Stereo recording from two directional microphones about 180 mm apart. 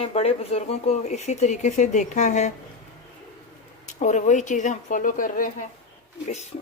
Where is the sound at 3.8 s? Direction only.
40° left (ahead or behind).